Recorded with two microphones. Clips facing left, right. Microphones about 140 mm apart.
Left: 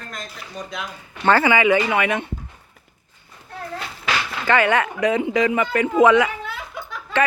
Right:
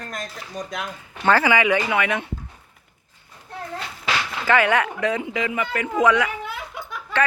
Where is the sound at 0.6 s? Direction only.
40° right (ahead or behind).